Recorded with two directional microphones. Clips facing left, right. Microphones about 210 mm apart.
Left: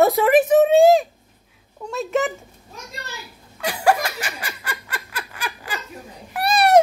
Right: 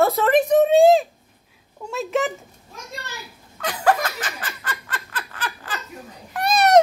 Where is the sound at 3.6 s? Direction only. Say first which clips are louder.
Left 1 dB; 10° left (ahead or behind).